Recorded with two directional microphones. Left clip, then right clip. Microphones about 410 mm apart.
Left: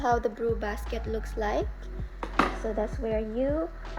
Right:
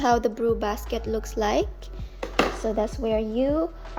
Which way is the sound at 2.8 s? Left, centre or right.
Right.